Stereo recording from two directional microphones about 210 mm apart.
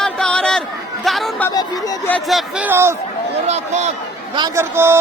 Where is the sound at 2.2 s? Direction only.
5° right (ahead or behind).